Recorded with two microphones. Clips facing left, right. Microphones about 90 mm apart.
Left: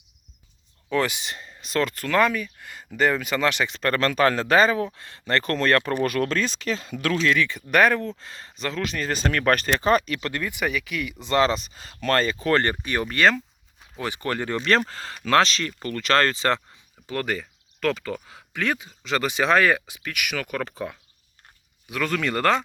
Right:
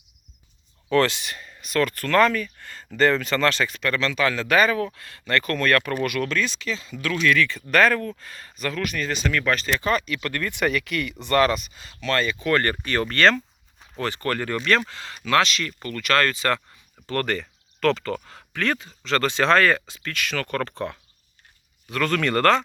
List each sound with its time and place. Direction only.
0.9 s speech: 5° left (ahead or behind)
1.1 s speech: 20° left (ahead or behind)
2.0 s speech: 10° left (ahead or behind)
3.8 s speech: 40° left (ahead or behind)
7.2 s speech: 20° left (ahead or behind); by 10.2 s 40° left (ahead or behind)
10.2 s speech: 25° left (ahead or behind)
10.4 s speech: 10° left (ahead or behind)
11.2 s speech: 20° left (ahead or behind)
12.7 s speech: 15° left (ahead or behind); by 16.6 s 30° left (ahead or behind)
17.1 s speech: 5° left (ahead or behind)